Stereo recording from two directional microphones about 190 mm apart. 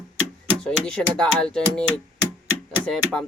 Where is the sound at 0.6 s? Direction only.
5° left (ahead or behind).